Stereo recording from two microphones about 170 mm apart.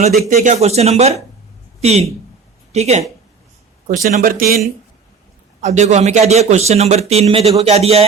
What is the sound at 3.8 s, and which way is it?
Speech, 60° right (ahead or behind).